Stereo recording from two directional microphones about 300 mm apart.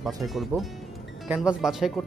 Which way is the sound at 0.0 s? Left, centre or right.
Centre.